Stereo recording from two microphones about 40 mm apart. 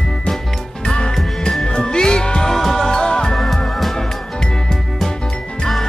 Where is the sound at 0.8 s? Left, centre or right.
Left.